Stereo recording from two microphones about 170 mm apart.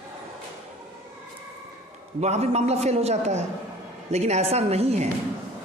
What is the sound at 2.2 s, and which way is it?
A man's voice, 40° right (ahead or behind).